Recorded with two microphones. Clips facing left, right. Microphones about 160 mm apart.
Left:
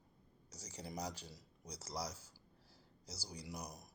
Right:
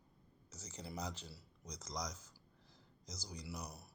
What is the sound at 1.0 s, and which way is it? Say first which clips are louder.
Mantra: left 1 dB; 10° left (ahead or behind).